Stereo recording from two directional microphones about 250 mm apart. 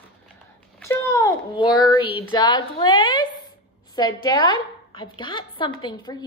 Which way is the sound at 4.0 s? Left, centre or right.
Centre.